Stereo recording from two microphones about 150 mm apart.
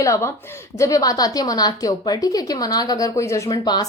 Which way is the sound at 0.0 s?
20° left (ahead or behind).